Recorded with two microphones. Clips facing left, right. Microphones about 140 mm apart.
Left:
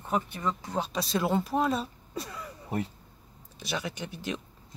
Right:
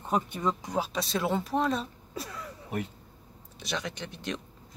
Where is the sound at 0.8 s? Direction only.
Centre (ahead or behind).